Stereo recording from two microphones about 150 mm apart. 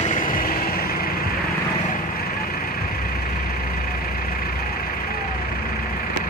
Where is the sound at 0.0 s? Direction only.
60° left (ahead or behind); by 1.2 s 85° left.